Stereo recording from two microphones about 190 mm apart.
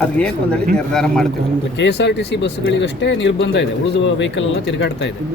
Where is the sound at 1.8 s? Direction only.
65° left (ahead or behind).